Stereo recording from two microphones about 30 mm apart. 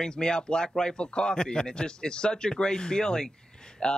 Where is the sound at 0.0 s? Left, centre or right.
Left.